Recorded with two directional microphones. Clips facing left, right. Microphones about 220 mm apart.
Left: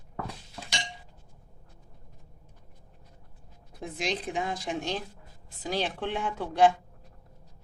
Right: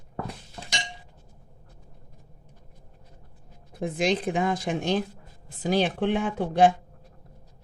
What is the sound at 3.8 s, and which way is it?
Speech, 55° right (ahead or behind).